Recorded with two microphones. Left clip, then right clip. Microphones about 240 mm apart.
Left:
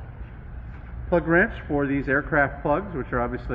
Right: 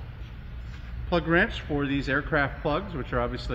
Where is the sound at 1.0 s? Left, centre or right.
Right.